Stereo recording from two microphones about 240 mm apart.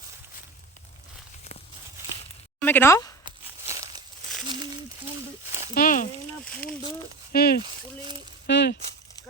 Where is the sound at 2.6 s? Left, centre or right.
Centre.